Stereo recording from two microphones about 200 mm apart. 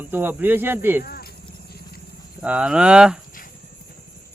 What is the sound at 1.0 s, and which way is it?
Cricket, 50° left (ahead or behind).